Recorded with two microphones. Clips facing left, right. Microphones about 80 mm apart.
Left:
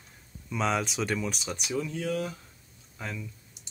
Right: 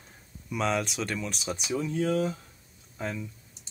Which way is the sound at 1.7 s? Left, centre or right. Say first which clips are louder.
Right 3 dB; right.